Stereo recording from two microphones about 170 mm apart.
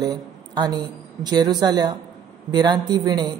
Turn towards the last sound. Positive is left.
turn(degrees=-25)  # may be behind; listen again after turning